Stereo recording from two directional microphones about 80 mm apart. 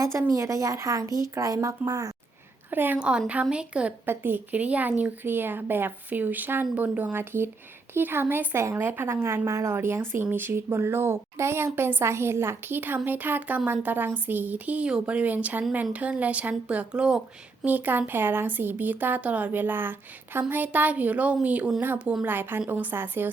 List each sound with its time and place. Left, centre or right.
0.0 s a woman's voice: right
2.6 s a woman's voice: right
3.0 s a woman's voice: centre
4.0 s a woman's voice: right
17.7 s a woman's voice: right
22.2 s speech: right